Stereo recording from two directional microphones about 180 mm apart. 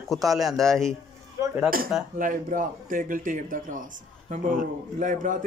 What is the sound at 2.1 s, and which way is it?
Speech, 50° right (ahead or behind).